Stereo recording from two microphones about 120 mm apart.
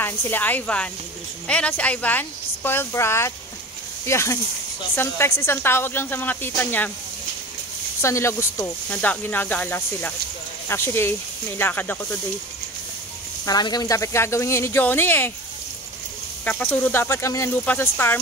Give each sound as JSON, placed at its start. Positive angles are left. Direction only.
{"t": 0.0, "sound": "speech", "side_deg": 15}
{"t": 8.0, "sound": "speech", "side_deg": 25}
{"t": 13.5, "sound": "speech", "side_deg": 35}
{"t": 16.4, "sound": "speech", "side_deg": 15}